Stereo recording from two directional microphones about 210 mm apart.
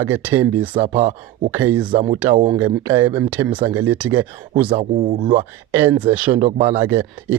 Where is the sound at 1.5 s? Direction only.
10° right (ahead or behind).